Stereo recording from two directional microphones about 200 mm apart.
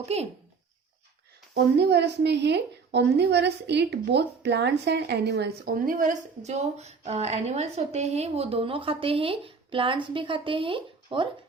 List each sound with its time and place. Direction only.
0.0 s speech: 30° right (ahead or behind)
1.5 s a woman's voice: 55° right (ahead or behind); by 11.3 s 25° right (ahead or behind)